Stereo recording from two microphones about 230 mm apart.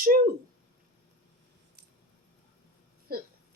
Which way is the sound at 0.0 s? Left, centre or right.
Right.